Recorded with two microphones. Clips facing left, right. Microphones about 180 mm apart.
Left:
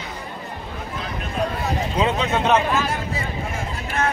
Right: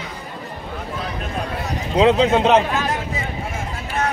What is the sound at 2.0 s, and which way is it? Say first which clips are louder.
Speech: right 8 dB; 90° right.